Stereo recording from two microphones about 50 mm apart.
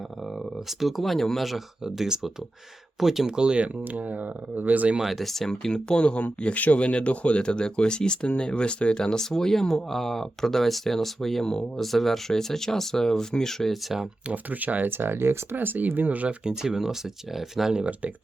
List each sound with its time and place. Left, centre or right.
0.3 s speech: centre
1.8 s speech: centre
3.8 s speech: right
4.9 s speech: centre
13.8 s speech: centre
14.3 s speech: right
14.8 s speech: right
15.5 s speech: right
16.4 s speech: centre